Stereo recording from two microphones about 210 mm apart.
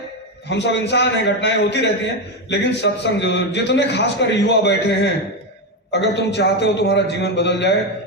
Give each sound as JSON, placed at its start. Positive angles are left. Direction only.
{"t": 0.4, "sound": "a man's voice", "side_deg": 55}